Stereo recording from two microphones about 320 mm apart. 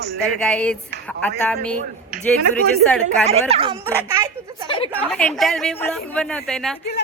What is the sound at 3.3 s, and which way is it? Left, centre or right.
Speech, centre.